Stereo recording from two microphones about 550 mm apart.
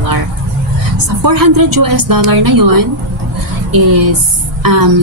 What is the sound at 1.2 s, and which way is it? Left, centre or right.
A woman's voice, right.